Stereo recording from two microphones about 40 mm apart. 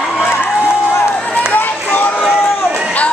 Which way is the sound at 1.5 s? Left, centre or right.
Left.